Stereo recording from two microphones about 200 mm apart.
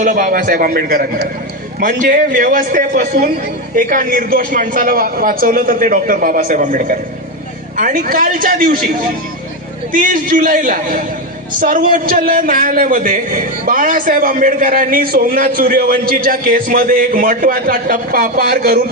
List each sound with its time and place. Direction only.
0.0 s a man's voice: 40° right (ahead or behind)
9.9 s a man's voice: 40° right (ahead or behind)